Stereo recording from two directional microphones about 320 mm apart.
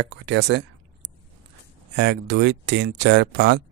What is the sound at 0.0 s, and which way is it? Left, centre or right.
Speech, right.